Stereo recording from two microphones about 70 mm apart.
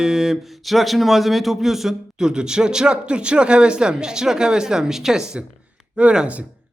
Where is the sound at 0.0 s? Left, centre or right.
Centre.